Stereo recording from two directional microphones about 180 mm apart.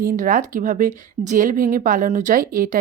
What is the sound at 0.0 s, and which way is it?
A woman's voice, 50° right (ahead or behind).